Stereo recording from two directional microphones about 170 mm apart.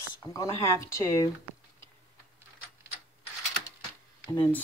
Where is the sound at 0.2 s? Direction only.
20° left (ahead or behind).